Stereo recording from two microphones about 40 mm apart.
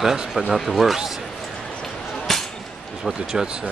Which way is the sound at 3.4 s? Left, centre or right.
Centre.